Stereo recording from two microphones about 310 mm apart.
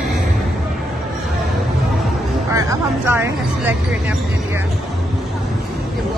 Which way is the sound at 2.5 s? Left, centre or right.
Centre.